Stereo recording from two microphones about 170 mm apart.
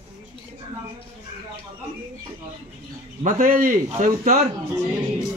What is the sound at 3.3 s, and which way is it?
A man's voice, 55° right (ahead or behind).